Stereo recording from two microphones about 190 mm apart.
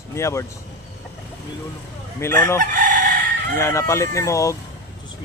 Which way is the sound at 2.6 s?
45° right (ahead or behind).